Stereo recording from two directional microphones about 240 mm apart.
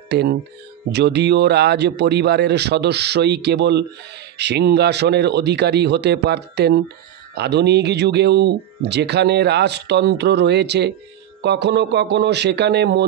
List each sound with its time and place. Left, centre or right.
0.1 s a man's voice: right